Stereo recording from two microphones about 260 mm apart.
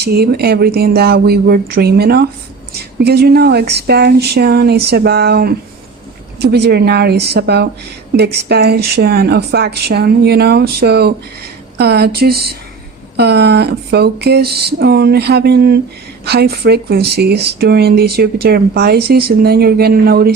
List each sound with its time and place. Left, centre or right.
0.0 s speech: right